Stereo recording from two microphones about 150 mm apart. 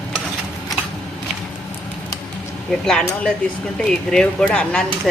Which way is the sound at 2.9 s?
5° left (ahead or behind).